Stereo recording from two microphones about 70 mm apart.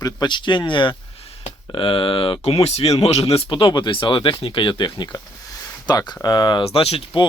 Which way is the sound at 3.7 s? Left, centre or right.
Left.